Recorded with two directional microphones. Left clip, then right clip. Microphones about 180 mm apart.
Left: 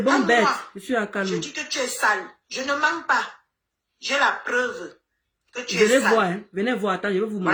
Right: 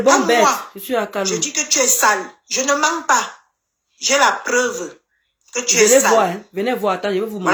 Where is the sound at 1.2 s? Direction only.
35° right (ahead or behind).